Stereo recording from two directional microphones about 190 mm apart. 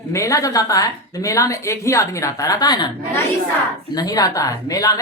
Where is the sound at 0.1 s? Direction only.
15° left (ahead or behind).